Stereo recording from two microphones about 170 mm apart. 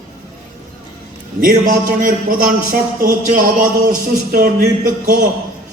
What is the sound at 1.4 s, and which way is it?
Speech, 55° right (ahead or behind).